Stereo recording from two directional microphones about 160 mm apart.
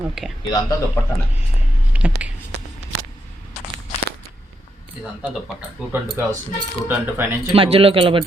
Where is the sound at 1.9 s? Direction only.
10° right (ahead or behind).